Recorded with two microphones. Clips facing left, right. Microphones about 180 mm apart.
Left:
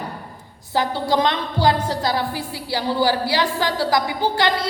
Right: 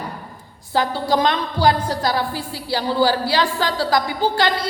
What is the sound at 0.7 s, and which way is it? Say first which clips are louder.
A woman's voice: right 1 dB; 20° left (ahead or behind).